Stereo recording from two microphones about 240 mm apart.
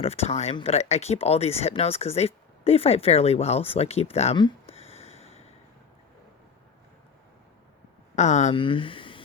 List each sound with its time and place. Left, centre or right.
0.0 s speech: left
8.1 s speech: left